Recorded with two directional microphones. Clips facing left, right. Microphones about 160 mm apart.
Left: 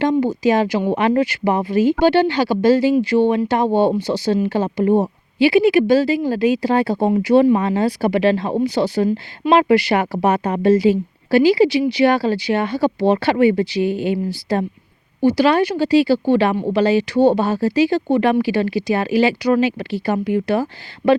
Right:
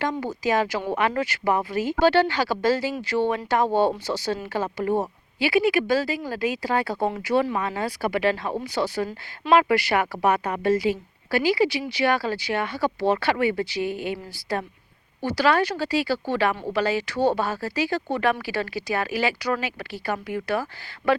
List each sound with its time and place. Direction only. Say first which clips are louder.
0.0 s speech: left 10 dB; 20° left (ahead or behind)
15.2 s speech: left 7 dB; 20° left (ahead or behind)